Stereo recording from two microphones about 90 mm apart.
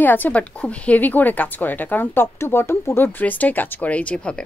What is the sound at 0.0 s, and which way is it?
Speech, 20° left (ahead or behind).